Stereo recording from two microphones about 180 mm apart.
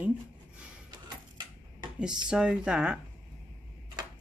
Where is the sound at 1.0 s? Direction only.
25° right (ahead or behind).